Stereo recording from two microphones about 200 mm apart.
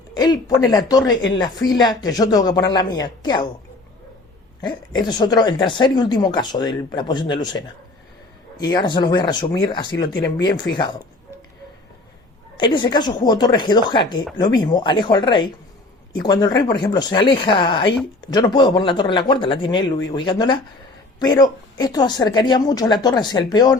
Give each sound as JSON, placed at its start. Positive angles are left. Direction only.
{"t": 0.1, "sound": "speech", "side_deg": 20}
{"t": 4.9, "sound": "speech", "side_deg": 20}
{"t": 12.5, "sound": "speech", "side_deg": 25}